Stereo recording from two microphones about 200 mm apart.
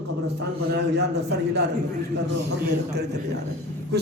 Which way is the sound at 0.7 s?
55° right (ahead or behind).